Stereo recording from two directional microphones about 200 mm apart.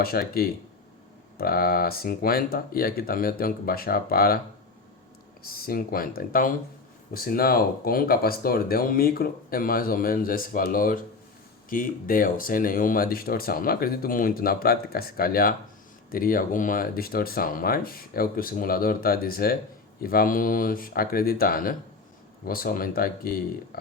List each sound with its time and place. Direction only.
0.0 s speech: 50° left (ahead or behind)
5.4 s speech: 50° left (ahead or behind)